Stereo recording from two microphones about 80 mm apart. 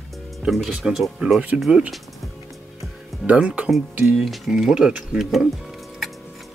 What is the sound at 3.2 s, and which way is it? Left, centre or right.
Speech, centre.